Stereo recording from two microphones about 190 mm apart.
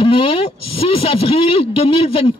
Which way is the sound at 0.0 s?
30° left (ahead or behind).